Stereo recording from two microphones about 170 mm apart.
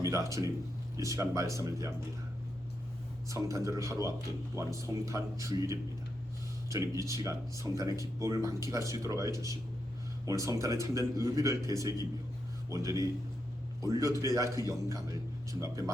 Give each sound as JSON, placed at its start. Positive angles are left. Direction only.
{"t": 0.0, "sound": "speech", "side_deg": -20}
{"t": 3.2, "sound": "speech", "side_deg": -20}